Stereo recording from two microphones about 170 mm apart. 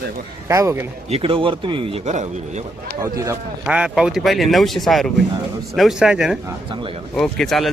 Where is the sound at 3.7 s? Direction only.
5° right (ahead or behind).